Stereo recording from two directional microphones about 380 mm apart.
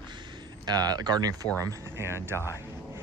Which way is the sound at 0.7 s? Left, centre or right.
Centre.